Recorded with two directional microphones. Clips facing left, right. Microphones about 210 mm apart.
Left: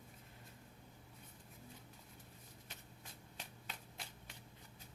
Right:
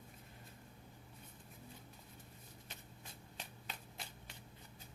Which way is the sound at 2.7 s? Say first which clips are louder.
Right 1 dB; 25° right (ahead or behind).